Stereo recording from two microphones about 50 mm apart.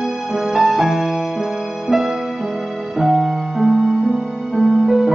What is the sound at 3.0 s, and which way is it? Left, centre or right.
Music, right.